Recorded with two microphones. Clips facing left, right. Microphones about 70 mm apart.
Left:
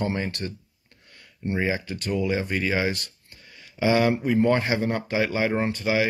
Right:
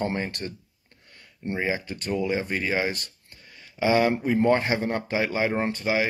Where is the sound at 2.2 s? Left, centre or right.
Right.